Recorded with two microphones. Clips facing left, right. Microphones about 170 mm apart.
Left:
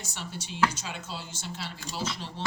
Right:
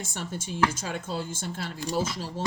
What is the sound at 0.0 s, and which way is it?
Speech, 50° right (ahead or behind).